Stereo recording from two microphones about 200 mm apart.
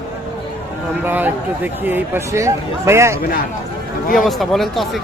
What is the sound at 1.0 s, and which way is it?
Speech, 10° right (ahead or behind).